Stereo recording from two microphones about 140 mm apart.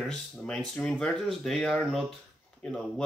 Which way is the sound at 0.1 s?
5° left (ahead or behind).